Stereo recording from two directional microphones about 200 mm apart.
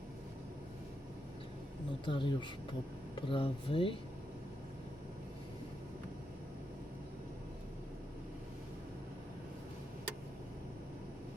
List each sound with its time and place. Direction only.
2.0 s speech: 25° left (ahead or behind)